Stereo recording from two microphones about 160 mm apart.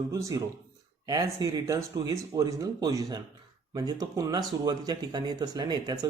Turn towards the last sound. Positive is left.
turn(degrees=-25)  # may be behind; listen again after turning